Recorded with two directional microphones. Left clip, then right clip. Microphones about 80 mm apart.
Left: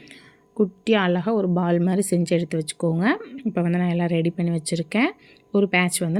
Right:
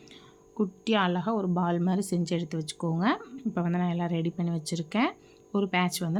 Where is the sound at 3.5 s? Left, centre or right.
Left.